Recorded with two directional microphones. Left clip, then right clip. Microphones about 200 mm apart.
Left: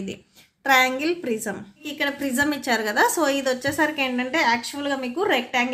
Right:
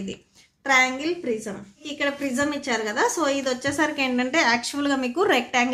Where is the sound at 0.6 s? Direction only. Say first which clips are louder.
Left 2 dB; 20° left (ahead or behind).